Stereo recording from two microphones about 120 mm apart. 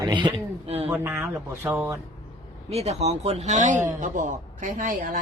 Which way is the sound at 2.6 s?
60° right (ahead or behind).